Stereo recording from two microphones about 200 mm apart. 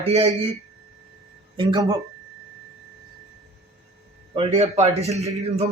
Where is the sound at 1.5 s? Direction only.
25° right (ahead or behind).